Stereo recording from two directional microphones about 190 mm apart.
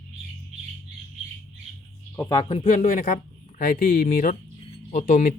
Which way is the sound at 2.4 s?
25° left (ahead or behind).